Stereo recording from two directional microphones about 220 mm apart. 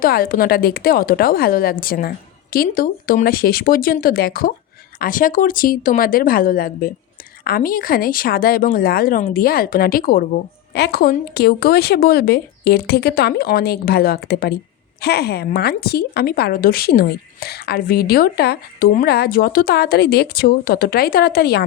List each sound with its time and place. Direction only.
0.0 s a woman's voice: 40° left (ahead or behind)